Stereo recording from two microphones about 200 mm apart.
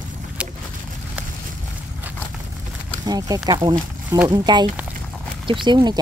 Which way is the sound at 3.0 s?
20° right (ahead or behind).